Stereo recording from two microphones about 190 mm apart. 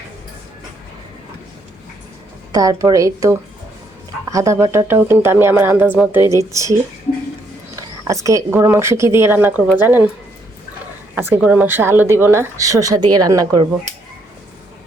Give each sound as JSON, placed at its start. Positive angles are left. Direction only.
{"t": 2.5, "sound": "speech", "side_deg": -20}
{"t": 8.0, "sound": "speech", "side_deg": -15}
{"t": 11.1, "sound": "speech", "side_deg": -10}